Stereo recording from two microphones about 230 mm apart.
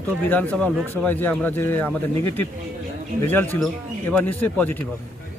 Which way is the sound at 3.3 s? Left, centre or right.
Centre.